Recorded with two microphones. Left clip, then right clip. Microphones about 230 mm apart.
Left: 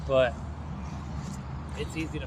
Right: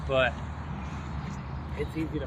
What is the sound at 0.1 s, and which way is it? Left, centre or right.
Speech, left.